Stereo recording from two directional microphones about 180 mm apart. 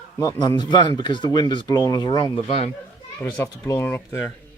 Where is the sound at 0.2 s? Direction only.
20° left (ahead or behind).